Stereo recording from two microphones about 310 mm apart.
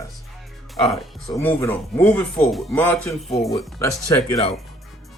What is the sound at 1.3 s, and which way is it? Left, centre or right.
Speech, centre.